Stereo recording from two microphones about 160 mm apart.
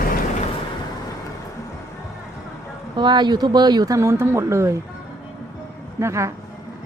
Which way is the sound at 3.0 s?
30° right (ahead or behind).